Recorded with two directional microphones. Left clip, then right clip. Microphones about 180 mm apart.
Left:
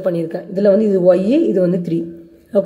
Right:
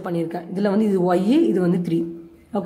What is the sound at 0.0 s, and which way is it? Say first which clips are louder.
A woman's voice: left 6 dB; 15° left (ahead or behind).